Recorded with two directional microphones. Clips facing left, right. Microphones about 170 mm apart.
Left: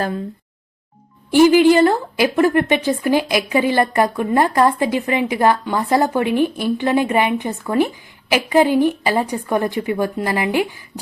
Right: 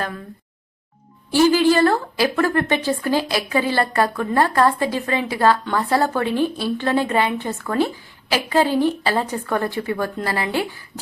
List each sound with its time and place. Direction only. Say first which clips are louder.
1.3 s a woman's voice: left 4 dB; 15° left (ahead or behind)